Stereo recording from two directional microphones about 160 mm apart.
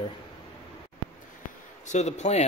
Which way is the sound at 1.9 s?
45° left (ahead or behind).